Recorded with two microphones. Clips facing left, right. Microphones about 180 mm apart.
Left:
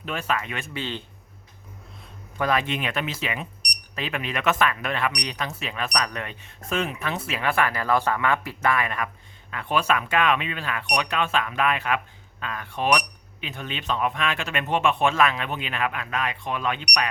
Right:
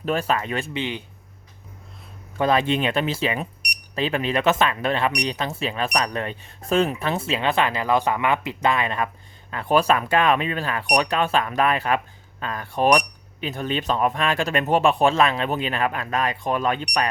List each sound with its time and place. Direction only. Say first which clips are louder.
0.0 s speech: right 5 dB; 35° right (ahead or behind)
0.7 s speech: right 4 dB; 15° right (ahead or behind)
2.4 s speech: right 5 dB; 30° right (ahead or behind)
9.5 s speech: right 5 dB; 35° right (ahead or behind)